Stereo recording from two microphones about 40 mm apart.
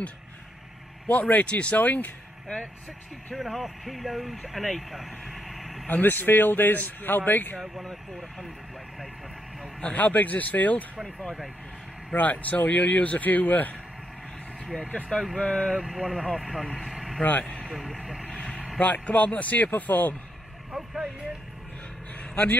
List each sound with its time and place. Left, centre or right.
1.0 s speech: left
1.4 s speech: left
3.3 s speech: centre
5.9 s a man's voice: left
7.8 s speech: centre
9.9 s a man's voice: left
12.1 s a man's voice: left
14.8 s speech: left
15.8 s speech: centre
16.9 s vehicle: centre
17.2 s speech: left
18.8 s a man's voice: left
20.7 s speech: centre
22.3 s a man's voice: left